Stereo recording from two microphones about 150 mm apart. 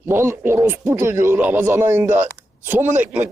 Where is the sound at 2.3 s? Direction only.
15° right (ahead or behind).